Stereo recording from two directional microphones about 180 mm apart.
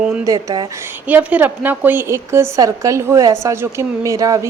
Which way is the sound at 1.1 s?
10° right (ahead or behind).